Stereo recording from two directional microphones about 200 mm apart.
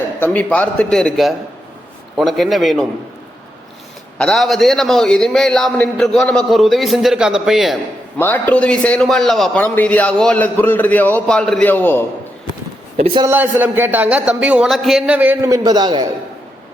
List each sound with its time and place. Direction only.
0.2 s a man's voice: 10° left (ahead or behind)
4.2 s a man's voice: centre (ahead or behind)
8.2 s a man's voice: 10° left (ahead or behind)
13.0 s a man's voice: 20° right (ahead or behind)
13.3 s a man's voice: 10° right (ahead or behind)